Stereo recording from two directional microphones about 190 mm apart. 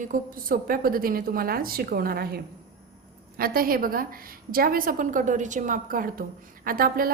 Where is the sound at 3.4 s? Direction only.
50° right (ahead or behind).